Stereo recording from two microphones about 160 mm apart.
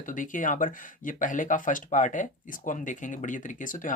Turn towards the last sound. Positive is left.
turn(degrees=55)  # may be behind; listen again after turning